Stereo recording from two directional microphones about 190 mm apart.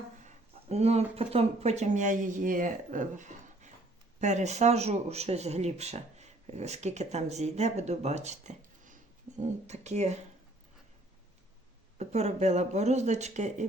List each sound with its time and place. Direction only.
0.7 s speech: 35° right (ahead or behind)
11.9 s speech: 35° right (ahead or behind)